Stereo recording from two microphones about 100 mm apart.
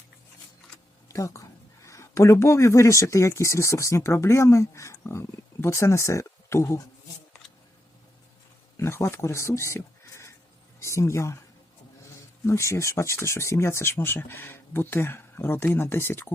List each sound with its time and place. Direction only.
1.0 s speech: 30° left (ahead or behind)
8.8 s speech: 25° left (ahead or behind)
12.5 s speech: 30° left (ahead or behind)